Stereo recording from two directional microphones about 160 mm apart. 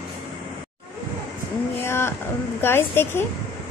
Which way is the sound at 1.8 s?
15° left (ahead or behind).